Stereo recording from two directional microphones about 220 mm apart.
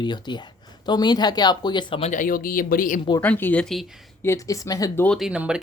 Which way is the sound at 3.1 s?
10° left (ahead or behind).